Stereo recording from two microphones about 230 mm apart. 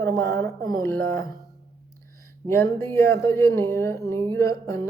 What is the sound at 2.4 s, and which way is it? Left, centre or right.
Speech, centre.